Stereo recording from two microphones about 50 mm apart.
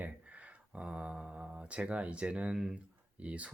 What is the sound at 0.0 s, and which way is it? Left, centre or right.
Speech, right.